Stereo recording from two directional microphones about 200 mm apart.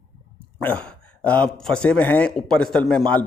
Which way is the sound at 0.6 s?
5° left (ahead or behind).